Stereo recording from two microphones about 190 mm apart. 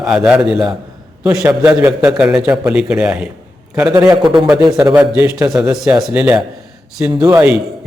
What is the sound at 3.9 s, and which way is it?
Speech, 20° right (ahead or behind).